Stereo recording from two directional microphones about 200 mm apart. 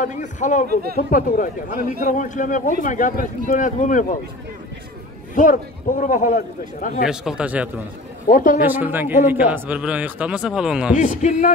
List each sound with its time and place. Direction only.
0.0 s speech: 35° left (ahead or behind)
5.3 s speech: 40° left (ahead or behind)
7.1 s speech: 5° right (ahead or behind)
8.3 s speech: 40° left (ahead or behind)
8.6 s speech: 10° right (ahead or behind)
11.0 s speech: 40° left (ahead or behind)